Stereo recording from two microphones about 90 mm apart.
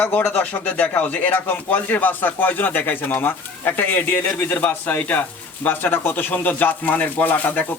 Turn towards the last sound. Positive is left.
turn(degrees=20)  # may be behind; listen again after turning